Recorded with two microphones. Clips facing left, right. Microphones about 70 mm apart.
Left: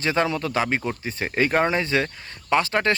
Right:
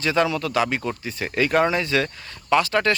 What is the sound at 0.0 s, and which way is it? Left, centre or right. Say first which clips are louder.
Speech: right 1 dB; left.